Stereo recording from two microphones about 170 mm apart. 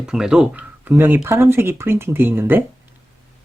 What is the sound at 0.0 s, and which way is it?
Speech, 5° right (ahead or behind).